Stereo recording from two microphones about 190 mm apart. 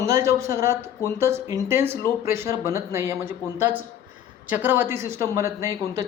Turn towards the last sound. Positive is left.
turn(degrees=-15)  # may be behind; listen again after turning